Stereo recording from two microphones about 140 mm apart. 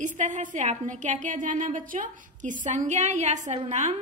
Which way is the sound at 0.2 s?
65° right (ahead or behind).